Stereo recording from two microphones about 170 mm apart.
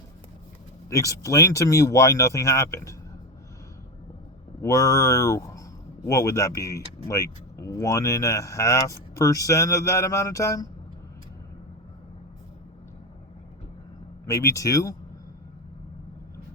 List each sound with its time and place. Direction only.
0.9 s speech: 20° left (ahead or behind)
4.6 s speech: 20° left (ahead or behind)
14.3 s speech: 20° left (ahead or behind)